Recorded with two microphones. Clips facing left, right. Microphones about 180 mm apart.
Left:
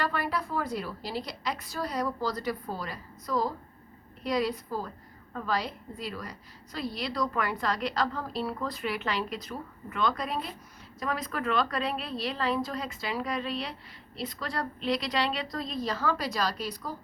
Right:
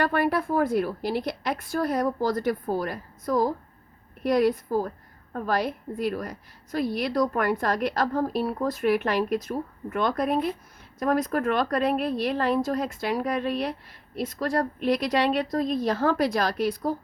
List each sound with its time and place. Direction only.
0.0 s a woman's voice: 55° right (ahead or behind)